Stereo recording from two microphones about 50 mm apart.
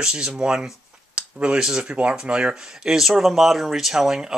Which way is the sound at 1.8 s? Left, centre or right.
Right.